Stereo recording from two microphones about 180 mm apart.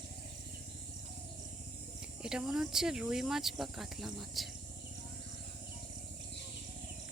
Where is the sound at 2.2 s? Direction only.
5° right (ahead or behind).